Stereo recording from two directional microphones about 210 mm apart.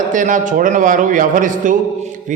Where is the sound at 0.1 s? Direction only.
40° right (ahead or behind).